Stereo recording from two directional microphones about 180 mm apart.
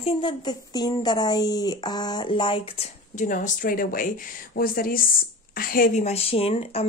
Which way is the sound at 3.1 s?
45° left (ahead or behind).